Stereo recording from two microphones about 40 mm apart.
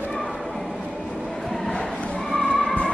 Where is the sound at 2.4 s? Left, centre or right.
Left.